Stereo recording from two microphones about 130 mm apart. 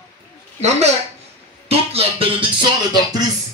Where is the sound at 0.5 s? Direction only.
55° right (ahead or behind).